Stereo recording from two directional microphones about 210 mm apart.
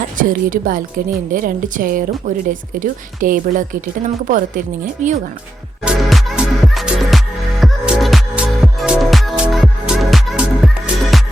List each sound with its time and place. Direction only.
0.2 s a woman's voice: 40° right (ahead or behind)
5.8 s music: centre (ahead or behind)